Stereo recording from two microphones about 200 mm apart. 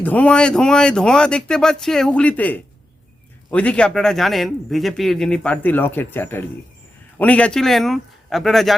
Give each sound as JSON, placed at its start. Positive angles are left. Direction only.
{"t": 0.0, "sound": "speech", "side_deg": 5}